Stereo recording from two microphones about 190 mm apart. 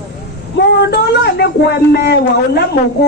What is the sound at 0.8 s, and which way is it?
Speech, 60° left (ahead or behind).